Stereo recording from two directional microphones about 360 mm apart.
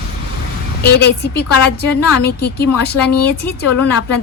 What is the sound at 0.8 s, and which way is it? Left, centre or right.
Speech, left.